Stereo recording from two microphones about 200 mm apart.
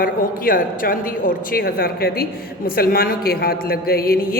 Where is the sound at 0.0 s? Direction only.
45° left (ahead or behind).